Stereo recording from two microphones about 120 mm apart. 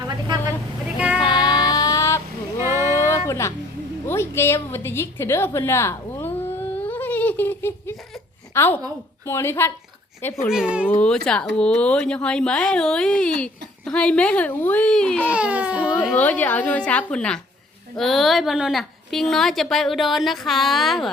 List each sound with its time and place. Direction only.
0.9 s child singing: 10° right (ahead or behind)
1.2 s child singing: 35° left (ahead or behind)
2.6 s a sound: 25° right (ahead or behind)
2.9 s a sound: 25° left (ahead or behind)
4.0 s a woman's voice: 20° left (ahead or behind)
10.5 s speech: 5° right (ahead or behind)
10.8 s speech: 10° left (ahead or behind)
15.3 s speech: 10° right (ahead or behind)
16.1 s a woman's voice: 15° left (ahead or behind)